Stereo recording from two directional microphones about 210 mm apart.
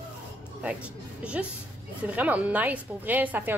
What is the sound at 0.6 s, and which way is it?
A woman's voice, 5° right (ahead or behind).